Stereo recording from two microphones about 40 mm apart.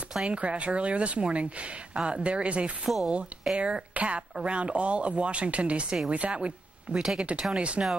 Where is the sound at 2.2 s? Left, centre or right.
Right.